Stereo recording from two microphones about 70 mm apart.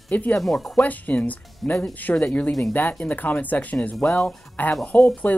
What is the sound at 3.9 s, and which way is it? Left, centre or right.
Speech, centre.